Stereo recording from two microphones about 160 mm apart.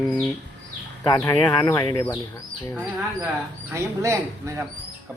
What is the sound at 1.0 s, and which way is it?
Speech, 20° left (ahead or behind).